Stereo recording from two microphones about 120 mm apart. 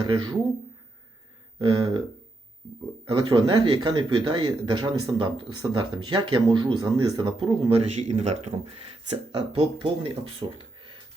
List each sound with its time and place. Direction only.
1.5 s a sound: 45° right (ahead or behind)
3.1 s speech: 40° right (ahead or behind)
5.1 s speech: 40° right (ahead or behind)
7.9 s speech: 65° right (ahead or behind); by 10.9 s 45° right (ahead or behind)